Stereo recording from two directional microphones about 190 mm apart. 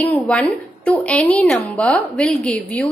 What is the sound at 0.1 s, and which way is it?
A woman's voice, 10° left (ahead or behind).